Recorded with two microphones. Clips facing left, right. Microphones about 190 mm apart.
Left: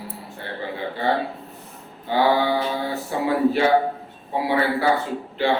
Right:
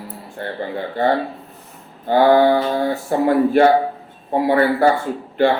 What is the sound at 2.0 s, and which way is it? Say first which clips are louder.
A man's voice: right 7 dB; 50° right (ahead or behind).